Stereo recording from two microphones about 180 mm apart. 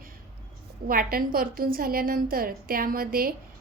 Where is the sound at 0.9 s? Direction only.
55° right (ahead or behind).